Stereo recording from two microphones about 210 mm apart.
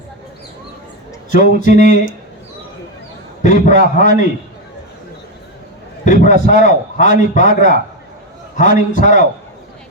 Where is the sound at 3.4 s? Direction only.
35° left (ahead or behind).